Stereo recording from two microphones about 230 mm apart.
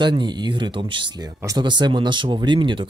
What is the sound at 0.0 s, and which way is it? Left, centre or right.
Speech, centre.